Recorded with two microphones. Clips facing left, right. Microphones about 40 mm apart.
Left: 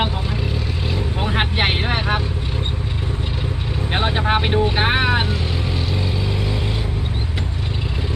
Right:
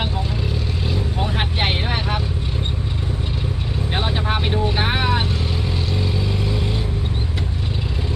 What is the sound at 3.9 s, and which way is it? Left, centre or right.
Vehicle, centre.